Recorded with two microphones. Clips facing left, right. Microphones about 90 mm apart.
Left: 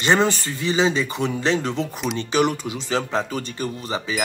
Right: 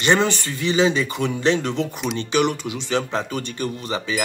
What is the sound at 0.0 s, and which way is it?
Speech, 35° left (ahead or behind).